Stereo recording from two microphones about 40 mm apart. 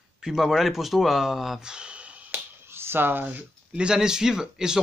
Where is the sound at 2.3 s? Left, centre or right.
Right.